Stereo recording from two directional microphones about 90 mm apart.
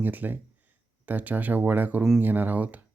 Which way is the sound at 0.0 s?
20° right (ahead or behind).